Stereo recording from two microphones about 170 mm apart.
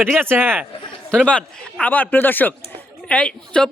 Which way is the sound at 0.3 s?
15° right (ahead or behind).